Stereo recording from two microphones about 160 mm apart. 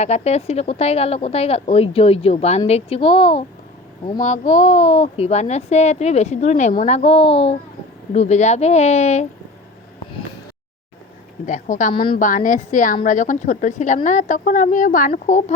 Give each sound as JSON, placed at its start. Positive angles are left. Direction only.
{"t": 0.0, "sound": "speech", "side_deg": 45}
{"t": 4.2, "sound": "speech", "side_deg": 50}
{"t": 11.4, "sound": "speech", "side_deg": 50}